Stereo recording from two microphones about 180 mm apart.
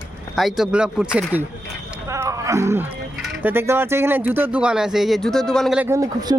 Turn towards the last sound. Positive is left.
turn(degrees=-20)  # may be behind; listen again after turning